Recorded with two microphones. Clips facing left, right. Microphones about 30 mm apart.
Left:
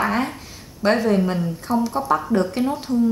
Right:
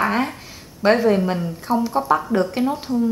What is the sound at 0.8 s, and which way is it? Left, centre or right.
A woman's voice, centre.